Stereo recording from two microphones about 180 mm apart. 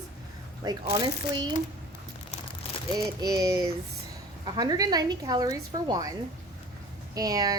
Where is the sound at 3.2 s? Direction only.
20° right (ahead or behind).